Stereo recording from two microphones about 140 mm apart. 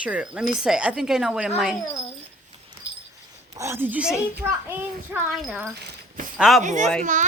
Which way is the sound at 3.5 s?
20° right (ahead or behind).